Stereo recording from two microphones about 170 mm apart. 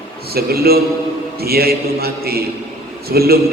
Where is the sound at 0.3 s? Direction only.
65° right (ahead or behind).